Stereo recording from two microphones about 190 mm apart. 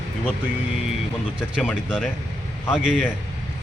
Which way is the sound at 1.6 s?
5° left (ahead or behind).